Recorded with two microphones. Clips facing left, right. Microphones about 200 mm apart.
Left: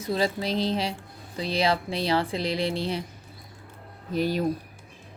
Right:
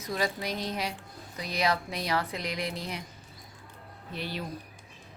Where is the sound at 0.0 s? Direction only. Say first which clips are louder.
Left 5 dB; 30° left (ahead or behind).